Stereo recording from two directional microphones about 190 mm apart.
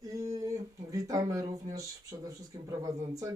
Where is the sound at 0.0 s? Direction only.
20° right (ahead or behind).